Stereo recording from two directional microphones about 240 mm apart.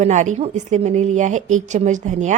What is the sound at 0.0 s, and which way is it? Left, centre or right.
A woman's voice, right.